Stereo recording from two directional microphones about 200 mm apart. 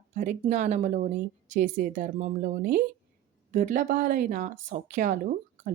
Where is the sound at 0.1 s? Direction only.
35° right (ahead or behind).